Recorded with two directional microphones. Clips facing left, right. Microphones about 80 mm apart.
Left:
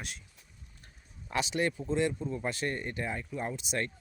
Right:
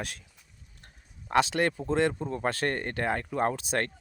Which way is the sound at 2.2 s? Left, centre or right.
Right.